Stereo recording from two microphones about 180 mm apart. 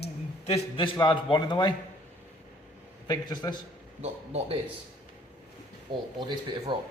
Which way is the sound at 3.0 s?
20° left (ahead or behind).